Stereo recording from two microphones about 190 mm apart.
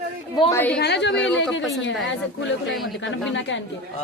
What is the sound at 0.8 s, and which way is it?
Speech, 65° left (ahead or behind).